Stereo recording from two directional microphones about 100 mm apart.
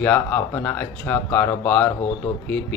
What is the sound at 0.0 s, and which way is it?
Speech, 15° left (ahead or behind).